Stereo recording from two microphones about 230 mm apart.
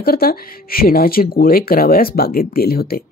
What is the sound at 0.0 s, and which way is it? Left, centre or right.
Speech, left.